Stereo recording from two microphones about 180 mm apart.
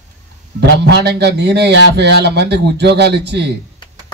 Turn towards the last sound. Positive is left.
turn(degrees=-70)  # may be behind; listen again after turning